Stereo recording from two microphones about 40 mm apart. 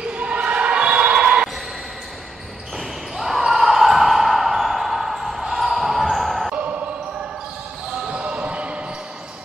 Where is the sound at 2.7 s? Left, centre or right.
Centre.